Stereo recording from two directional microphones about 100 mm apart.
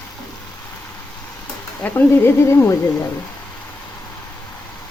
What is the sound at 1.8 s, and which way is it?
Speech, 25° left (ahead or behind).